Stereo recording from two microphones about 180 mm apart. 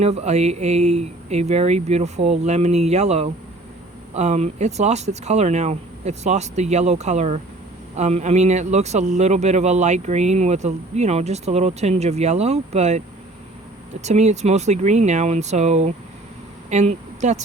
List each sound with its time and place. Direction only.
0.0 s a man's voice: 35° right (ahead or behind)
14.0 s a man's voice: 40° right (ahead or behind)